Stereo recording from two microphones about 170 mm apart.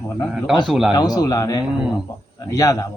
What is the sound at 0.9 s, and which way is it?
Speech, 20° left (ahead or behind).